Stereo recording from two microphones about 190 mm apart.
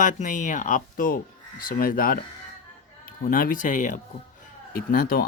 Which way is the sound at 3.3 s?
50° left (ahead or behind).